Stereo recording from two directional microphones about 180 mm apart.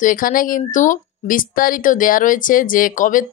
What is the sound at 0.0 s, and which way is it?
Speech, 50° left (ahead or behind).